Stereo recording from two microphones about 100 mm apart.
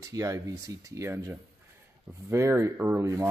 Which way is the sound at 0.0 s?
35° right (ahead or behind).